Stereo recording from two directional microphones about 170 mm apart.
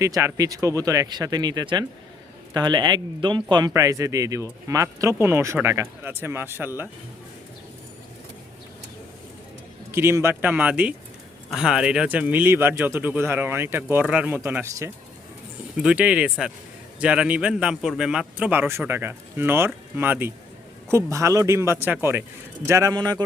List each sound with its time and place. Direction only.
0.0 s speech: 15° right (ahead or behind)
9.9 s speech: 15° right (ahead or behind)